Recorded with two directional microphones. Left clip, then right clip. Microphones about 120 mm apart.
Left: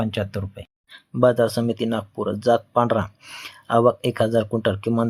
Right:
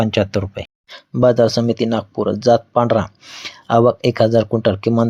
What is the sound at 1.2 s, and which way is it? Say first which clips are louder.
Speech: right 5 dB; 25° right (ahead or behind).